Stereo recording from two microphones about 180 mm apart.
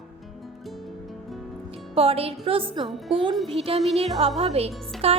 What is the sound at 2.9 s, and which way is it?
Speech, centre (ahead or behind).